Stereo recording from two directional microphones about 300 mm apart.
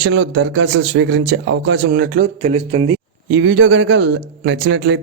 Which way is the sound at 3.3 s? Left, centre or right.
Right.